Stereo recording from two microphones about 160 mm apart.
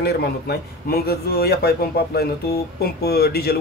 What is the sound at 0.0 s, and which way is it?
A man's voice, 85° left.